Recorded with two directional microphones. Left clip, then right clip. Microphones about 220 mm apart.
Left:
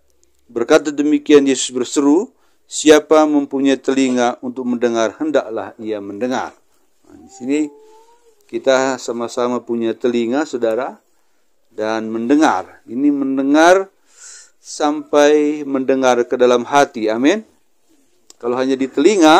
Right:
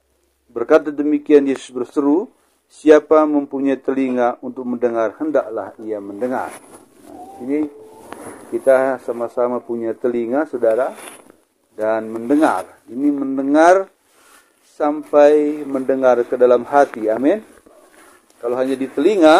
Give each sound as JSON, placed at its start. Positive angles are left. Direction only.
{"t": 0.5, "sound": "speech", "side_deg": 40}
{"t": 8.6, "sound": "speech", "side_deg": 50}
{"t": 18.4, "sound": "speech", "side_deg": 45}